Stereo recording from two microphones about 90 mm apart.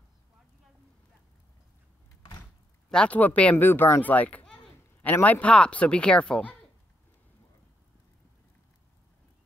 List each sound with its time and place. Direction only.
2.9 s a child's voice: 10° left (ahead or behind)